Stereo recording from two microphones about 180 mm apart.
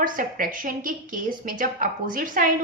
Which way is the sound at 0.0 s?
50° right (ahead or behind).